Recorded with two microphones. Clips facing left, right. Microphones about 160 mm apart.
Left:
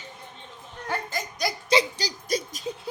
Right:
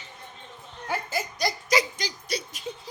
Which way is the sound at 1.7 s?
30° left (ahead or behind).